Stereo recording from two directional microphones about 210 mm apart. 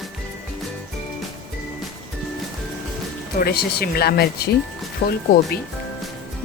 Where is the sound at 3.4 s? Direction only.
45° left (ahead or behind).